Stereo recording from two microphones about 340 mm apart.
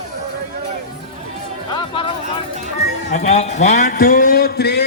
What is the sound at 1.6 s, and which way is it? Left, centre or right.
Music, centre.